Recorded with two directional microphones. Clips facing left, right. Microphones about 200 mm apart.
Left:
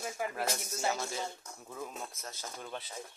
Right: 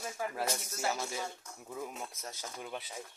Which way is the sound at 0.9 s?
10° right (ahead or behind).